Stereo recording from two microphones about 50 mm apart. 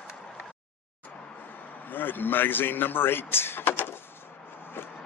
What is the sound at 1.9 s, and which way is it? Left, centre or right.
Speech, left.